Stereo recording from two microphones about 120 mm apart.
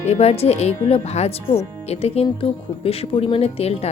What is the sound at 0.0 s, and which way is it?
Speech, 65° left (ahead or behind).